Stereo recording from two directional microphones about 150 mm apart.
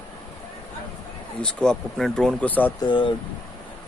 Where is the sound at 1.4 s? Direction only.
5° left (ahead or behind).